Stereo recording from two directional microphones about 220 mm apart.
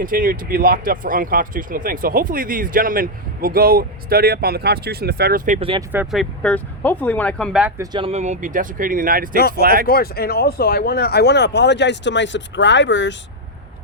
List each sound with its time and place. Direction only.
0.0 s speech: 40° right (ahead or behind)
5.5 s speech: 25° right (ahead or behind)
5.9 s speech: 5° right (ahead or behind)
7.8 s speech: 25° right (ahead or behind); by 9.8 s 40° right (ahead or behind)
9.8 s speech: 45° left (ahead or behind)